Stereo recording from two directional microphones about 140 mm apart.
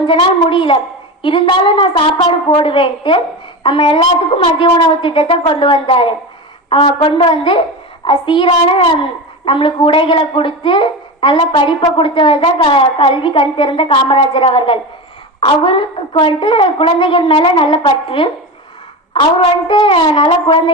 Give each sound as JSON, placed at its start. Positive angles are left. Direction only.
{"t": 0.1, "sound": "a child's voice", "side_deg": 40}
{"t": 19.4, "sound": "a child's voice", "side_deg": 35}